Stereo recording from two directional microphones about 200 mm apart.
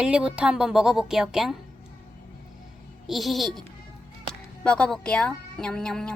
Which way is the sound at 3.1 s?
Centre (ahead or behind).